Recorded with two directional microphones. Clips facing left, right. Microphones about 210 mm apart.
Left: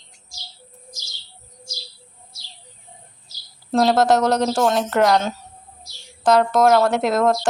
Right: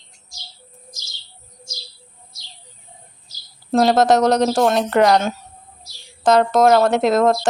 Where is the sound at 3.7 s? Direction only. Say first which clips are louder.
Right 2 dB; 20° right (ahead or behind).